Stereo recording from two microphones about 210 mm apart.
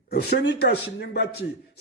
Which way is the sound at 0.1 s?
50° left (ahead or behind).